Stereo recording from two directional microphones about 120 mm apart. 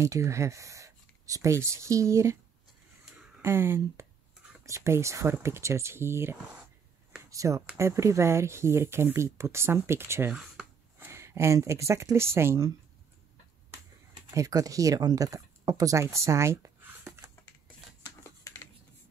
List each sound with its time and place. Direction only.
0.0 s speech: 25° right (ahead or behind)
3.4 s speech: 20° right (ahead or behind)
14.3 s speech: 30° right (ahead or behind)
18.0 s a sound: 25° left (ahead or behind)